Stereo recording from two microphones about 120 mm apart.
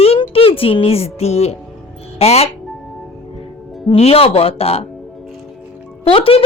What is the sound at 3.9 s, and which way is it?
Speech, 55° left (ahead or behind).